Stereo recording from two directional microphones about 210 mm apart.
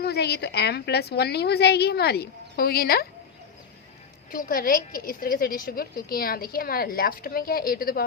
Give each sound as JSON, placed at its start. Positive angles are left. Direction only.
{"t": 0.0, "sound": "a woman's voice", "side_deg": 50}
{"t": 4.3, "sound": "a woman's voice", "side_deg": 40}